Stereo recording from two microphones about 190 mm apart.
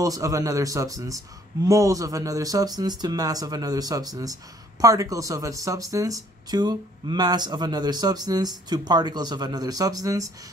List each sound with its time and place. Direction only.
0.0 s speech: 20° right (ahead or behind)